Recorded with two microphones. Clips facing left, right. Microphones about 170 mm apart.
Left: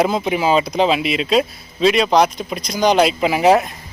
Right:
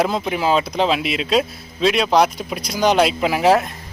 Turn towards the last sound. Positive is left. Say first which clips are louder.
# left 2 dB
turn(degrees=0)  # may be behind; listen again after turning